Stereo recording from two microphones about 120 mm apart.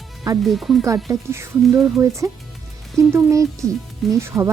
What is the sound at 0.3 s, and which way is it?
Speech, centre (ahead or behind).